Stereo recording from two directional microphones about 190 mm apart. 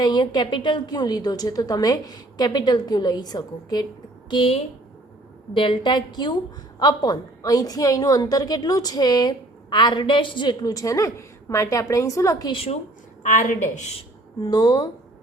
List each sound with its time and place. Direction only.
0.0 s a woman's voice: 20° left (ahead or behind)
14.4 s a woman's voice: 20° left (ahead or behind)